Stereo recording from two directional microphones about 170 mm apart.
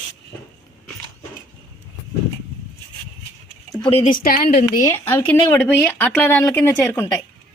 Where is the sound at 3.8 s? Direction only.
35° left (ahead or behind).